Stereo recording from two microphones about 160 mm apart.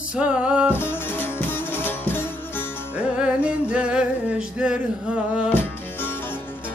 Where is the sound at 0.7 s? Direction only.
15° left (ahead or behind).